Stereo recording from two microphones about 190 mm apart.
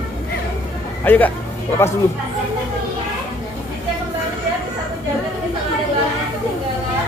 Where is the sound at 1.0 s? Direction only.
10° left (ahead or behind).